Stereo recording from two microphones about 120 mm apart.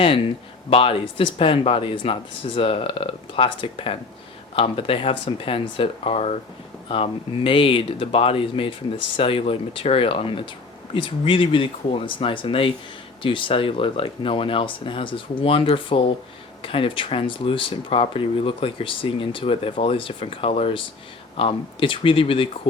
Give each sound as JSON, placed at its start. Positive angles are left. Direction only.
{"t": 0.7, "sound": "speech", "side_deg": 50}